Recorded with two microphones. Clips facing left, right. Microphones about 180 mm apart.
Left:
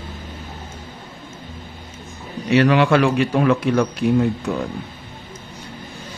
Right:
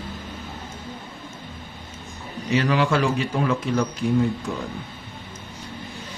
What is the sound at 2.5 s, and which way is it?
A man's voice, 65° left (ahead or behind).